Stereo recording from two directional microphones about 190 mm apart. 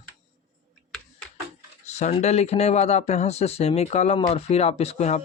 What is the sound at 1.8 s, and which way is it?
Speech, 35° left (ahead or behind).